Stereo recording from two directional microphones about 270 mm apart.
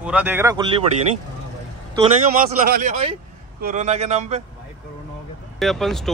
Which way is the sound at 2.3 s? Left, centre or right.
Right.